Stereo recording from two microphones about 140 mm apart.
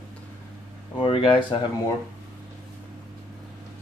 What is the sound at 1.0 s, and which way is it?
Speech, 40° left (ahead or behind).